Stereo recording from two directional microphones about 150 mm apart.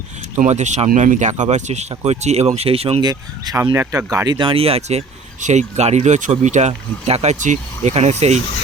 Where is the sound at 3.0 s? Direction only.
25° right (ahead or behind).